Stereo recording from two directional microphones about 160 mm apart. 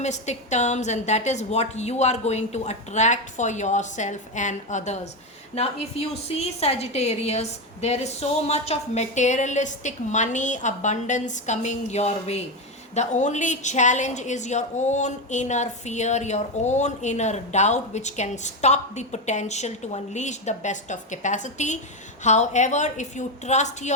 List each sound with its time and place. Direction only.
0.0 s a woman's voice: 45° left (ahead or behind)